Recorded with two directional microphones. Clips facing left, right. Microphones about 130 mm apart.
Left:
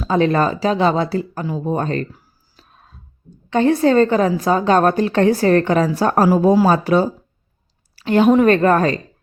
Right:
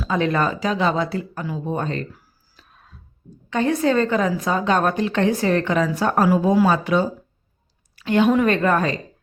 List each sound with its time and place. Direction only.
0.0 s a woman's voice: 35° left (ahead or behind)
2.6 s music: 30° left (ahead or behind)
3.5 s a woman's voice: 30° left (ahead or behind)